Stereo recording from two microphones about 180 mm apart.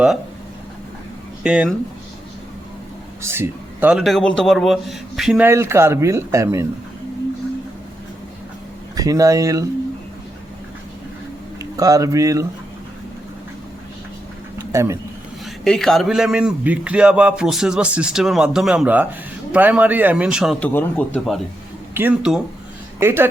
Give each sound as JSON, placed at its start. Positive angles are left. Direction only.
{"t": 1.5, "sound": "a man's voice", "side_deg": -5}
{"t": 3.2, "sound": "a man's voice", "side_deg": -15}
{"t": 5.5, "sound": "speech", "side_deg": -15}
{"t": 9.0, "sound": "speech", "side_deg": -20}
{"t": 11.6, "sound": "speech", "side_deg": -20}
{"t": 14.7, "sound": "speech", "side_deg": -15}
{"t": 15.4, "sound": "a man's voice", "side_deg": 0}
{"t": 21.9, "sound": "speech", "side_deg": -10}